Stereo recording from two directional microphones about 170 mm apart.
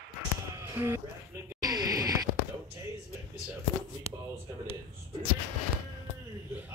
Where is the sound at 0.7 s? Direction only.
15° right (ahead or behind).